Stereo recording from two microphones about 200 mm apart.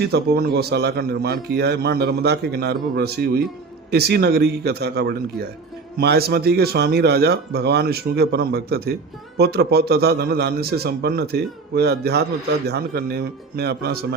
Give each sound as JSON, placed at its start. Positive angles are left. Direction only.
{"t": 0.0, "sound": "a man's voice", "side_deg": -50}